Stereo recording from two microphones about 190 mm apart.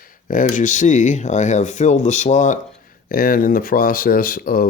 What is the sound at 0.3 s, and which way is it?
Speech, 45° left (ahead or behind).